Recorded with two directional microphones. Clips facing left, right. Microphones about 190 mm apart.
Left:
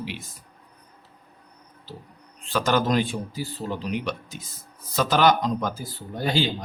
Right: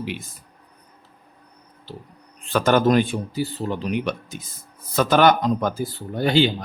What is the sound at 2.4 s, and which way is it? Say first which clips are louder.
Speech: right 5 dB; 55° right (ahead or behind).